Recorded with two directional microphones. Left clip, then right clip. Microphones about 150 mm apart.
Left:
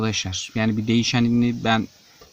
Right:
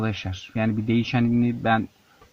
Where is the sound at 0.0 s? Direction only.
15° left (ahead or behind).